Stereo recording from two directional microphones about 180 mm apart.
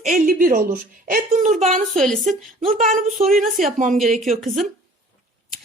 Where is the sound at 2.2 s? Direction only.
45° right (ahead or behind).